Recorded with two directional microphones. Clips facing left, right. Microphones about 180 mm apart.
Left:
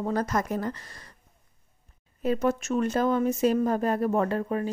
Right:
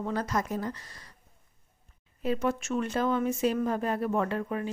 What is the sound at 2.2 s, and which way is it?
Speech, 45° left (ahead or behind).